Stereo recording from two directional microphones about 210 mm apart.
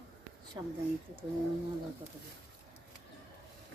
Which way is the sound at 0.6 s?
15° right (ahead or behind).